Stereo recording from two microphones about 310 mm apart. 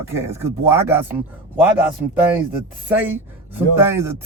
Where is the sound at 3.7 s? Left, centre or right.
Centre.